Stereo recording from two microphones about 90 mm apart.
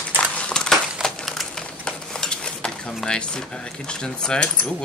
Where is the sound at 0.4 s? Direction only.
10° left (ahead or behind).